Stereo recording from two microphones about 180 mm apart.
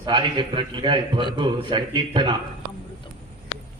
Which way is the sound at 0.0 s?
25° right (ahead or behind).